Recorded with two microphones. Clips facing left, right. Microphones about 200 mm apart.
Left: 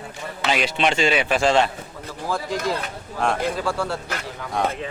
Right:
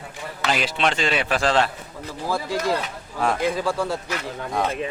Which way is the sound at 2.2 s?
10° right (ahead or behind).